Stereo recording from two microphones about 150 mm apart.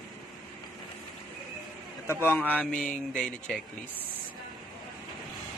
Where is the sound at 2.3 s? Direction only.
10° left (ahead or behind).